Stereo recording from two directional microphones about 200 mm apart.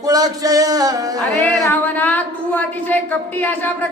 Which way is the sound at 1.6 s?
10° left (ahead or behind).